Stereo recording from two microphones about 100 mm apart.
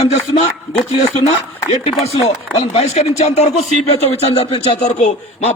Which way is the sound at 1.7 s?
90° left.